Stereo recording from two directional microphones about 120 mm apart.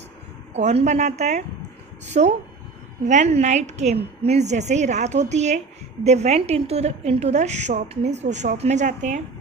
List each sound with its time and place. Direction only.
0.5 s a woman's voice: 65° right (ahead or behind); by 9.2 s 90° right